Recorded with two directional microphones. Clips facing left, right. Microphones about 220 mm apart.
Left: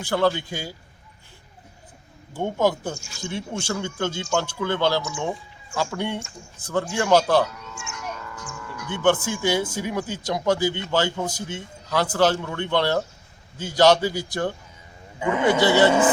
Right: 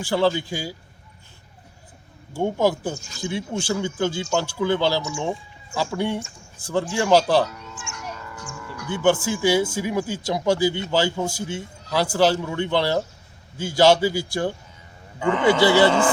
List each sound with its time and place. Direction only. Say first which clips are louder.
0.0 s a man's voice: right 1 dB; 5° right (ahead or behind)
2.3 s a man's voice: right 1 dB; 5° right (ahead or behind)
15.2 s speech: right 2 dB; 10° left (ahead or behind)
15.5 s speech: right 1 dB; 20° left (ahead or behind)
15.9 s speech: left 1 dB; 5° left (ahead or behind)